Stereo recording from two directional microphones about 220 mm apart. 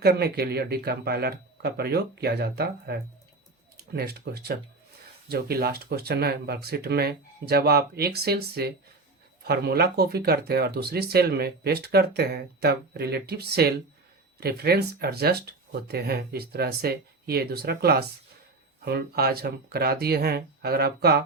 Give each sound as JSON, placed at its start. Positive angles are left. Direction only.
{"t": 0.0, "sound": "speech", "side_deg": -45}